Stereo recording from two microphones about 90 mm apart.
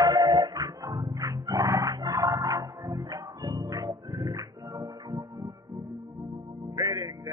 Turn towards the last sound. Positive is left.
turn(degrees=-45)  # may be behind; listen again after turning